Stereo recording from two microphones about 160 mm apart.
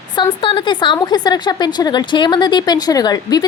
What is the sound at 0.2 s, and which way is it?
A woman's voice, 30° left (ahead or behind).